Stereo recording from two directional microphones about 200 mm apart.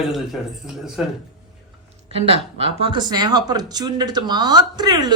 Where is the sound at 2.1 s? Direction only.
30° right (ahead or behind).